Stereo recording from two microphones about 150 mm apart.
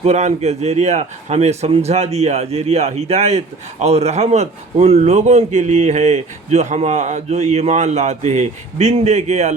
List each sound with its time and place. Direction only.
0.0 s a man's voice: 50° right (ahead or behind)